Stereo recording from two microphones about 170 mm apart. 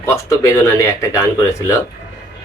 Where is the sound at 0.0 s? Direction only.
15° left (ahead or behind).